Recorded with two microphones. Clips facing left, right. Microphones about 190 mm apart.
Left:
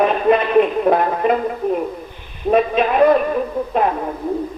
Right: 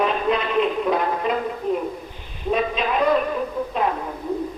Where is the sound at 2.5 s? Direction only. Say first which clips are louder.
Left 7 dB; 55° left (ahead or behind).